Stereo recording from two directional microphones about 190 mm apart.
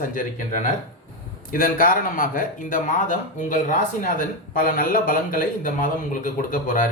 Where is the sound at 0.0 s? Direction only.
45° left (ahead or behind).